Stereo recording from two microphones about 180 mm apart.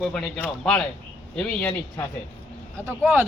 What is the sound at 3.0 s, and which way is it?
Speech, 10° right (ahead or behind).